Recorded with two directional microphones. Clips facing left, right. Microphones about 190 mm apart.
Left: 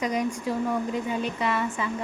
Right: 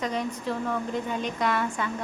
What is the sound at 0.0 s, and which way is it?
A woman's voice, 10° left (ahead or behind).